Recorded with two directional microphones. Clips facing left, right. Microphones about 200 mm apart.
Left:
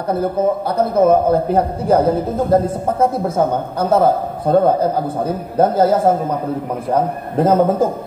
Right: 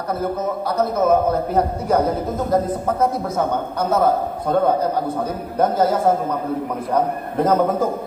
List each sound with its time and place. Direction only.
0.1 s a man's voice: 30° left (ahead or behind)
7.4 s a man's voice: 30° left (ahead or behind)